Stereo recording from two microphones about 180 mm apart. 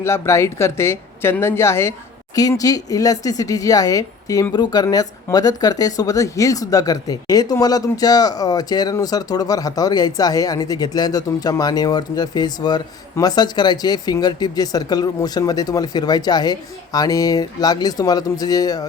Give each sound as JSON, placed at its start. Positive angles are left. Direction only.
{"t": 0.0, "sound": "speech", "side_deg": 15}